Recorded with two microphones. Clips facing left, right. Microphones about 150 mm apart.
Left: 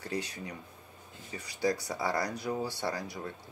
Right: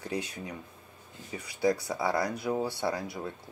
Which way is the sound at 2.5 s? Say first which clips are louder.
Right 4 dB; 20° right (ahead or behind).